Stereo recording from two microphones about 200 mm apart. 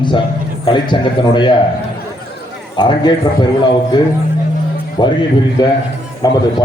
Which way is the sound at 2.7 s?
20° left (ahead or behind).